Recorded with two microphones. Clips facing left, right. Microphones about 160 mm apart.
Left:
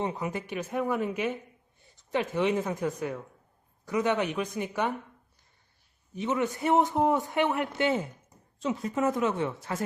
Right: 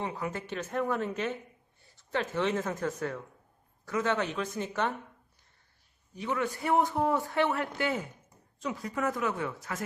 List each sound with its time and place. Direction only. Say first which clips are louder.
0.0 s speech: left 3 dB; 20° left (ahead or behind)
6.1 s a man's voice: left 3 dB; 20° left (ahead or behind)